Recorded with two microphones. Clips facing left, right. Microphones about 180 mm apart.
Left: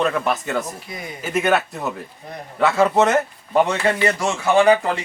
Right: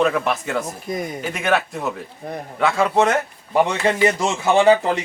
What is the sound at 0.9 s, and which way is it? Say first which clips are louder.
Speech: right 8 dB; 45° right (ahead or behind).